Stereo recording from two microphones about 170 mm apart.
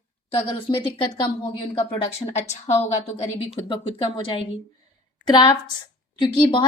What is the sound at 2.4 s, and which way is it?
A woman's voice, 40° left (ahead or behind).